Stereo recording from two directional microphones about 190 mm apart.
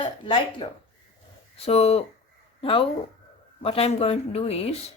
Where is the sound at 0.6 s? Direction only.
30° left (ahead or behind).